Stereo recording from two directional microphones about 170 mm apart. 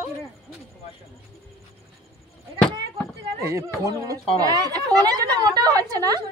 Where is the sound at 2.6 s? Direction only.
5° left (ahead or behind).